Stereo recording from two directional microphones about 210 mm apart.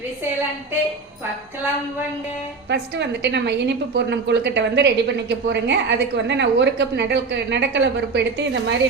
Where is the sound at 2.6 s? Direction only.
55° right (ahead or behind).